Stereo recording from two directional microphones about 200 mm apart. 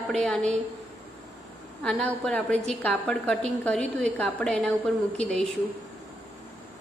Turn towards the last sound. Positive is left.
turn(degrees=5)  # may be behind; listen again after turning